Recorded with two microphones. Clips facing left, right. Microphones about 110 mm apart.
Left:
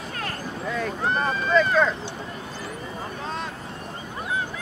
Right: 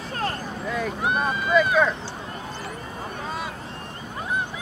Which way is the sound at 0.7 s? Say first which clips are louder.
Even; 5° right (ahead or behind).